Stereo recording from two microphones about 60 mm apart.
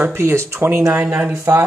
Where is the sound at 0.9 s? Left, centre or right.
Right.